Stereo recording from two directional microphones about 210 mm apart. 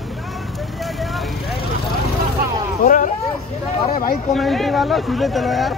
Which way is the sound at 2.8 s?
40° left (ahead or behind).